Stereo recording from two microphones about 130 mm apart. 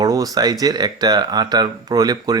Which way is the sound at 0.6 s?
30° right (ahead or behind).